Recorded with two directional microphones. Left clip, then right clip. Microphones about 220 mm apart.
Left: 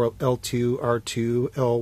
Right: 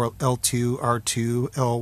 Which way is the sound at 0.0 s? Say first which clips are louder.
Left 1 dB; 15° right (ahead or behind).